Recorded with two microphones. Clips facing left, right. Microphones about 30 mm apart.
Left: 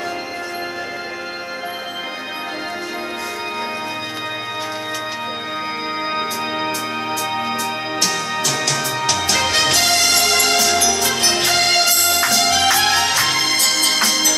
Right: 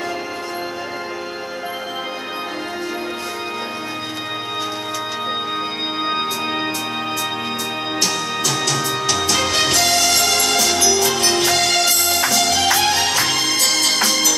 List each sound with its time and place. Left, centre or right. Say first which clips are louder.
6.1 s music: even; centre
9.6 s music: left 1 dB; centre
10.0 s music: left 1 dB; centre
10.4 s music: left 1 dB; centre
10.7 s music: even; left; by 12.4 s centre
12.4 s music: left 1 dB; left
12.8 s music: left 1 dB; left
13.5 s music: even; centre